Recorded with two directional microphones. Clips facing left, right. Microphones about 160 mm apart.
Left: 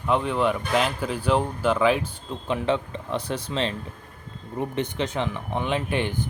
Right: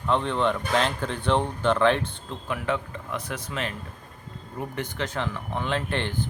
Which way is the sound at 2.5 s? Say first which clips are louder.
Left 4 dB; 25° left (ahead or behind).